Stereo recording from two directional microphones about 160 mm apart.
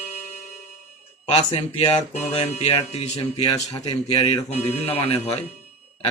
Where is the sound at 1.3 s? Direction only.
40° left (ahead or behind).